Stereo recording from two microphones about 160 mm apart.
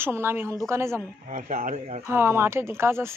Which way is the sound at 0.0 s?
15° right (ahead or behind).